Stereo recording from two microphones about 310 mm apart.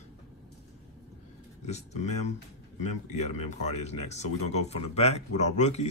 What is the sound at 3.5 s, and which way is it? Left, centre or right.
Speech, left.